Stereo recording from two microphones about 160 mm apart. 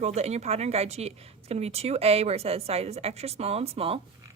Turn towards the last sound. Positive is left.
turn(degrees=-40)  # may be behind; listen again after turning